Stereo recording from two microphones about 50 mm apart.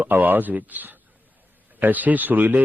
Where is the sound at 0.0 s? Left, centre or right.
Right.